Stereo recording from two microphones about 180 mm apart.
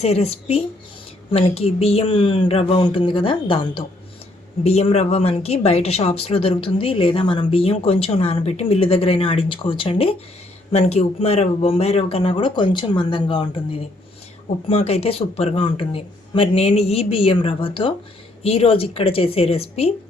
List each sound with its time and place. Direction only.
0.0 s a woman's voice: 35° left (ahead or behind)